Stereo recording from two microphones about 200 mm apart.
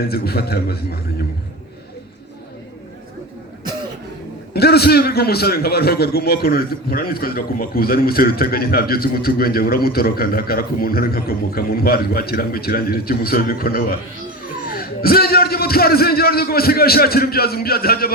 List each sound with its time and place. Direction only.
0.1 s a man's voice: 50° left (ahead or behind)
4.5 s a man's voice: 55° left (ahead or behind)